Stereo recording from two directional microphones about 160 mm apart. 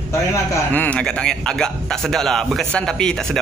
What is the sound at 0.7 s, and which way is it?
A man's voice, 5° left (ahead or behind).